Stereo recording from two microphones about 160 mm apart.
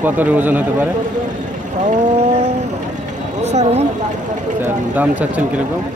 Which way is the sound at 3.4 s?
45° right (ahead or behind).